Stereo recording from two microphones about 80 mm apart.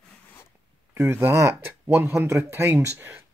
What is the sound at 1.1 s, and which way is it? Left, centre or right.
Speech, right.